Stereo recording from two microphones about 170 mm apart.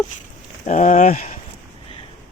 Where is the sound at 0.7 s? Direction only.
45° left (ahead or behind).